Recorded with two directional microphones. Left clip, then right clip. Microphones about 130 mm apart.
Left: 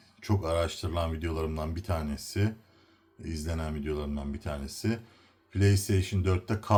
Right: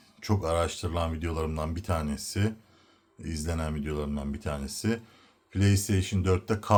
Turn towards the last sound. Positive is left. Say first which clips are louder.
# right 3 dB
turn(degrees=-30)  # may be behind; listen again after turning